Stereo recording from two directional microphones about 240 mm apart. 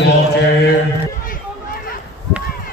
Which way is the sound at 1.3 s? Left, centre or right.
Left.